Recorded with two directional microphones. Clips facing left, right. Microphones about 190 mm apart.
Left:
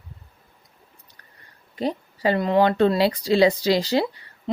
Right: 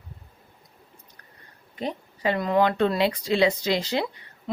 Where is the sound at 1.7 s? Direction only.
35° left (ahead or behind).